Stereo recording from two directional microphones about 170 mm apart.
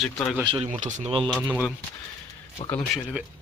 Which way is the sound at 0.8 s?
35° right (ahead or behind).